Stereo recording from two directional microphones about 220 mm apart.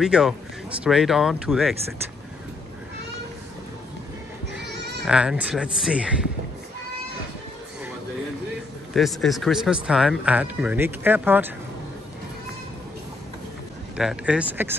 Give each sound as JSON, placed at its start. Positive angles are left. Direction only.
{"t": 0.0, "sound": "speech", "side_deg": -5}
{"t": 4.6, "sound": "bleat", "side_deg": -50}
{"t": 5.0, "sound": "speech", "side_deg": -5}
{"t": 8.9, "sound": "speech", "side_deg": 0}
{"t": 13.9, "sound": "speech", "side_deg": -5}